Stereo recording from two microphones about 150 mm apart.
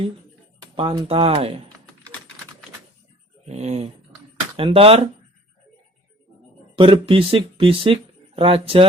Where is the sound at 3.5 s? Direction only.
45° right (ahead or behind).